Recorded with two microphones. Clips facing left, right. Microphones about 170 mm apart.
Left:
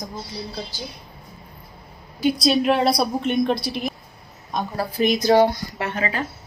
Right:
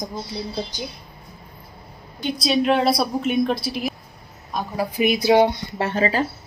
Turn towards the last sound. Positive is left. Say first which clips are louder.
# right 4 dB
turn(degrees=-35)  # may be behind; listen again after turning